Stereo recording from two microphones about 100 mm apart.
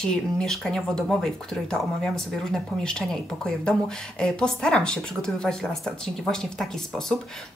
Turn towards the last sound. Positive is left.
turn(degrees=5)  # may be behind; listen again after turning